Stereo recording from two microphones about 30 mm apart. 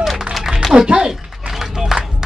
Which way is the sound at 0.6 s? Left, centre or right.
Centre.